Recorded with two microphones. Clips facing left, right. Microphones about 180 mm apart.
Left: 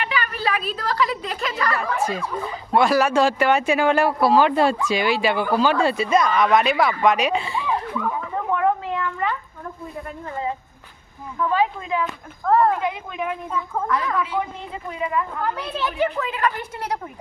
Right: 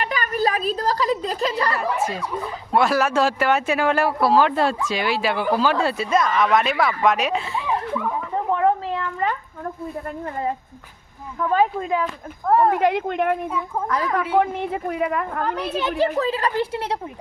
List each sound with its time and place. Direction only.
0.0 s a woman's voice: 45° right (ahead or behind)
1.7 s speech: centre (ahead or behind)
8.4 s cat: 30° right (ahead or behind)
11.3 s speech: 45° right (ahead or behind)
12.5 s speech: 15° right (ahead or behind)
12.8 s speech: 70° right (ahead or behind)
13.8 s a woman's voice: 40° right (ahead or behind); by 15.3 s 60° right (ahead or behind)
16.0 s a woman's voice: 35° right (ahead or behind)